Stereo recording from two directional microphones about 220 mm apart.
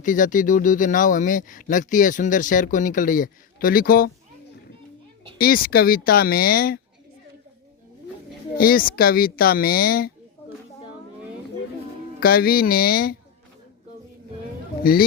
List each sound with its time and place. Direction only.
0.0 s speech: 35° left (ahead or behind)
5.4 s speech: 40° left (ahead or behind)
8.5 s speech: 40° left (ahead or behind)
12.2 s speech: 45° left (ahead or behind)